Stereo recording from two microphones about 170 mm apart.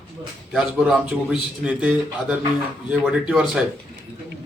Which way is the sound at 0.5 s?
5° right (ahead or behind).